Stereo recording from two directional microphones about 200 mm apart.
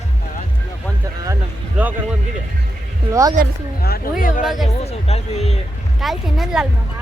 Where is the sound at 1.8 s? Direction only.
5° right (ahead or behind).